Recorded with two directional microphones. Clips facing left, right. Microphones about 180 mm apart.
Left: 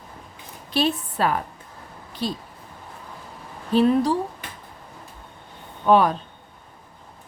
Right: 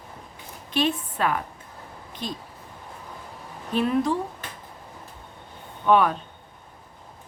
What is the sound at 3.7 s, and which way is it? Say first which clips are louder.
Speech: left 5 dB; 35° left (ahead or behind).